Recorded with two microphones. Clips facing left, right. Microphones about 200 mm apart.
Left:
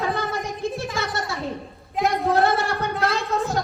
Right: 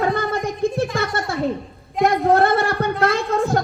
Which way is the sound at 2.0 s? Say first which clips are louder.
Right 4 dB; 55° right (ahead or behind).